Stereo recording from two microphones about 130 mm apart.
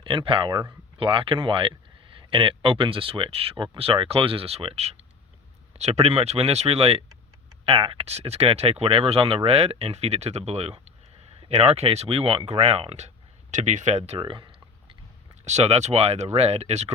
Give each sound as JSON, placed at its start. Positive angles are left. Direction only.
{"t": 0.0, "sound": "speech", "side_deg": -40}
{"t": 13.5, "sound": "speech", "side_deg": -65}
{"t": 14.2, "sound": "a sound", "side_deg": -40}
{"t": 15.4, "sound": "speech", "side_deg": -55}